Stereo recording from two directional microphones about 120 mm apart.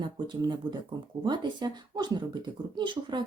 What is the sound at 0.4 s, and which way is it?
Speech, 40° right (ahead or behind).